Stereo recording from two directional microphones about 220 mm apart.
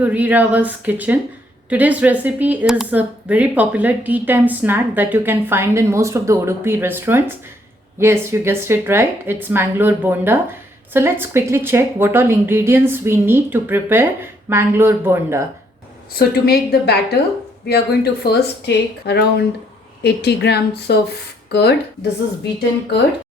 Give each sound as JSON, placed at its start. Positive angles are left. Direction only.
{"t": 0.0, "sound": "speech", "side_deg": -10}
{"t": 16.1, "sound": "speech", "side_deg": 45}